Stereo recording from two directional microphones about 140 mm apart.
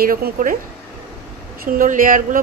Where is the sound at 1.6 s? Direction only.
75° right (ahead or behind).